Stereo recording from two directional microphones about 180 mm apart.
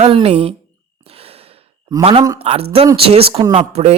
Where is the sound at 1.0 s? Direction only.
35° right (ahead or behind).